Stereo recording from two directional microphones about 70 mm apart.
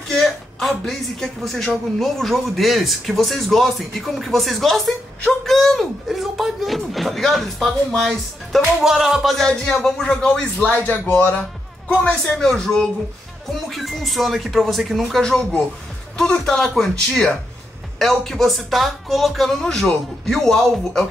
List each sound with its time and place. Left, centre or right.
0.1 s speech: centre
5.2 s a sound: centre
8.5 s speech: centre
11.1 s speech: left
12.0 s speech: centre